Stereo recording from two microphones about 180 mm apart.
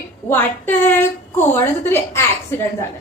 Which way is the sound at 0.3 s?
10° left (ahead or behind).